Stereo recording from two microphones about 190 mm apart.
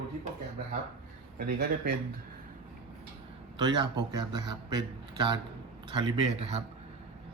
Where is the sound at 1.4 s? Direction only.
55° right (ahead or behind).